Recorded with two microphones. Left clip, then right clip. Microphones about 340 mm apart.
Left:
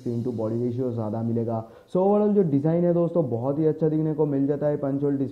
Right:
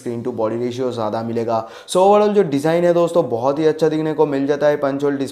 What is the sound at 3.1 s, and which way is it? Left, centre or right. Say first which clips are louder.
Speech: right 8 dB; centre.